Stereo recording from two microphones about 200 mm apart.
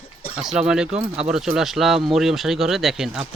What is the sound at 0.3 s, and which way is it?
Speech, centre (ahead or behind).